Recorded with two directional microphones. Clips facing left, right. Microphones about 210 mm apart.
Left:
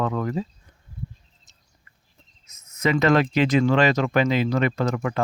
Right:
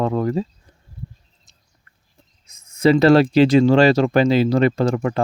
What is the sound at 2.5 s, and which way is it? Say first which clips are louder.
Speech: right 8 dB; 30° right (ahead or behind).